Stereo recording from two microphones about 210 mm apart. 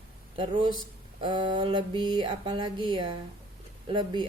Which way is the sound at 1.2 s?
20° right (ahead or behind).